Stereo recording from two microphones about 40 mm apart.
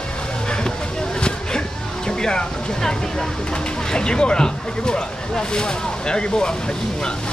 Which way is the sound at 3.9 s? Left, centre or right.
Left.